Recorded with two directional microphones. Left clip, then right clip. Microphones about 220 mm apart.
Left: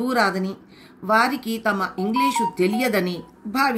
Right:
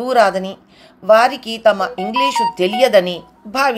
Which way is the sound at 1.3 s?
50° right (ahead or behind).